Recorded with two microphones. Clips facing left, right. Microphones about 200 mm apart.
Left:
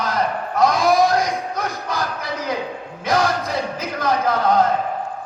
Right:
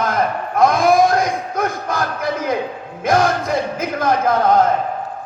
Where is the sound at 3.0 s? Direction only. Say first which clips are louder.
Right 4 dB; 50° right (ahead or behind).